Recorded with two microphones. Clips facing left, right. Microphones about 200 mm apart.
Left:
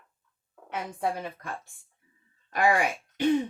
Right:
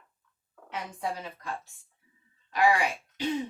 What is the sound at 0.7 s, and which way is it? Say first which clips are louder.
A woman's voice: left 4 dB; 55° left (ahead or behind).